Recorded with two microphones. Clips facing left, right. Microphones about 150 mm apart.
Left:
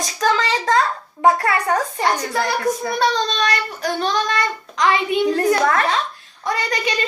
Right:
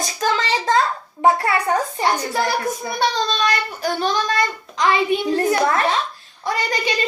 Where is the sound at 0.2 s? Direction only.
30° right (ahead or behind).